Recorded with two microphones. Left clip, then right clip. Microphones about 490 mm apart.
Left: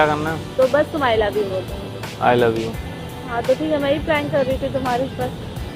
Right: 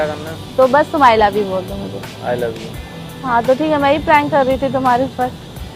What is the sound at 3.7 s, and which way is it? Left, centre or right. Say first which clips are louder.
Speech: right 7 dB; right.